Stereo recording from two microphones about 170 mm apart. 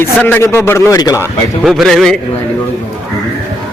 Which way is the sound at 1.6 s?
Centre (ahead or behind).